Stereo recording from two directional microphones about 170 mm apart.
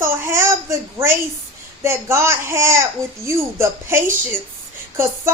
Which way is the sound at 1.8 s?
15° right (ahead or behind).